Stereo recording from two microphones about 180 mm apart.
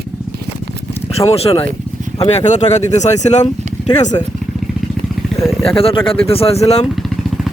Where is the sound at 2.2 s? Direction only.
40° left (ahead or behind).